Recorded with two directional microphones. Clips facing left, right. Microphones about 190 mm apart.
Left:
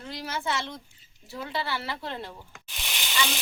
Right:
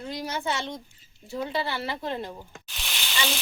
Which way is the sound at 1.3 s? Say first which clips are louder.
Right 3 dB; 20° right (ahead or behind).